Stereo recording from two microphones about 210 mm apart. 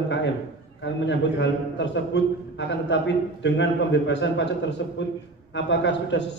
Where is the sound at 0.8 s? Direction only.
60° left (ahead or behind).